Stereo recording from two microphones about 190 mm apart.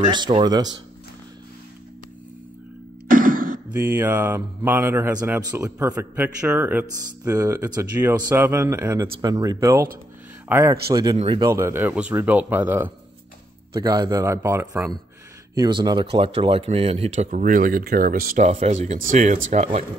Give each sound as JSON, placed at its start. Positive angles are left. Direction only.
{"t": 0.1, "sound": "a man's voice", "side_deg": -25}
{"t": 3.1, "sound": "music", "side_deg": -45}
{"t": 3.7, "sound": "a man's voice", "side_deg": -10}
{"t": 13.7, "sound": "a man's voice", "side_deg": -20}